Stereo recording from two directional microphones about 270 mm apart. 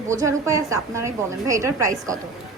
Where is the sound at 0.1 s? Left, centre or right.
Centre.